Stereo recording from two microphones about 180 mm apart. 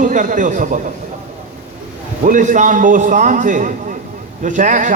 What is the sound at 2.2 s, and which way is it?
A man's voice, 45° right (ahead or behind).